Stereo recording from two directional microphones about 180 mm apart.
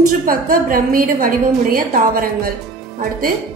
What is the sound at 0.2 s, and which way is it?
A woman's voice, 50° right (ahead or behind).